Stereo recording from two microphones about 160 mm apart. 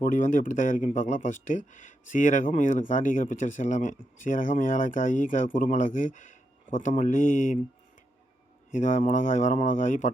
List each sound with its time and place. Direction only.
0.0 s speech: 50° left (ahead or behind)
8.7 s speech: 50° left (ahead or behind)